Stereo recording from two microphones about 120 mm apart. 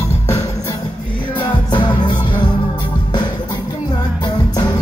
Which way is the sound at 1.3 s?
40° left (ahead or behind).